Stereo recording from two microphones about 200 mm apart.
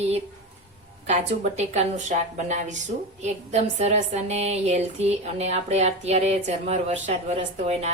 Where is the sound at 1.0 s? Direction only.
35° right (ahead or behind).